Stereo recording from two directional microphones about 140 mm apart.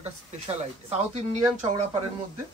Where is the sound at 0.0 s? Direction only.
50° right (ahead or behind).